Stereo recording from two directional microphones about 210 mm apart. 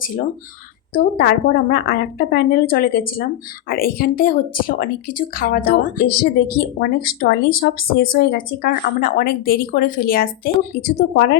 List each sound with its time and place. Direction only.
0.9 s speech: 50° left (ahead or behind)